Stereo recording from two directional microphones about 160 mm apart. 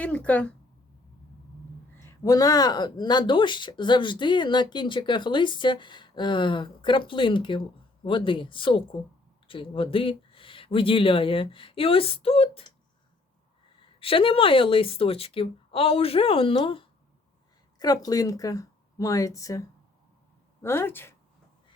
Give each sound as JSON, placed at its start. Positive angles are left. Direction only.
{"t": 0.0, "sound": "speech", "side_deg": 10}
{"t": 2.0, "sound": "speech", "side_deg": 20}
{"t": 13.7, "sound": "speech", "side_deg": 35}
{"t": 17.7, "sound": "speech", "side_deg": 25}